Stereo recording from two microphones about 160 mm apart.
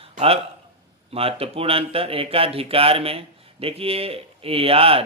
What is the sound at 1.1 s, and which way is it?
Speech, 35° right (ahead or behind).